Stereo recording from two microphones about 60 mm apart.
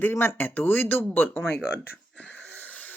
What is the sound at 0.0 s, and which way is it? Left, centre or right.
Speech, left.